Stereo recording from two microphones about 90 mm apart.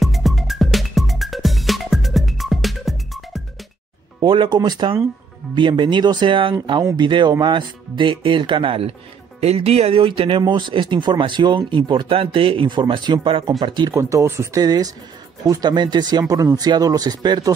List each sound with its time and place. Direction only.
0.0 s music: centre (ahead or behind)
4.2 s speech: 60° right (ahead or behind)
4.6 s speech: 50° right (ahead or behind); by 6.5 s 70° right (ahead or behind)
7.0 s speech: 60° right (ahead or behind); by 8.8 s 75° right (ahead or behind)
9.6 s speech: 90° right
10.7 s speech: 65° right (ahead or behind)
13.6 s speech: 55° right (ahead or behind)
13.9 s speech: 30° right (ahead or behind)
14.6 s speech: 45° right (ahead or behind)